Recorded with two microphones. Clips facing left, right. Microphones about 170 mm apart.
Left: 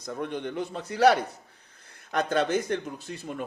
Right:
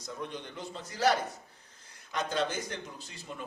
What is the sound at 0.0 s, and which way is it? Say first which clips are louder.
Speech: left 8 dB; 60° left (ahead or behind).